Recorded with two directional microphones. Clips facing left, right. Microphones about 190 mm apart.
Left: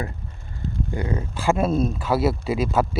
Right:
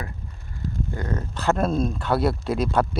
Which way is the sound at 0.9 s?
10° left (ahead or behind).